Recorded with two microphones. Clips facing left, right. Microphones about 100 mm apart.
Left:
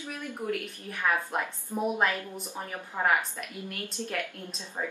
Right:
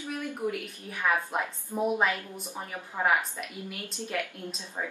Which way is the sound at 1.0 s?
5° right (ahead or behind).